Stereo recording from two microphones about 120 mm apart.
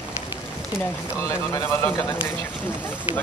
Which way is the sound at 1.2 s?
25° left (ahead or behind).